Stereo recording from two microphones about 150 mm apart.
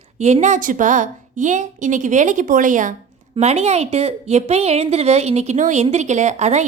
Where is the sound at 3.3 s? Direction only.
45° right (ahead or behind).